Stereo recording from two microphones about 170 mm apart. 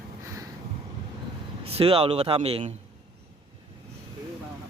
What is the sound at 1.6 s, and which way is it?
Speech, 35° right (ahead or behind).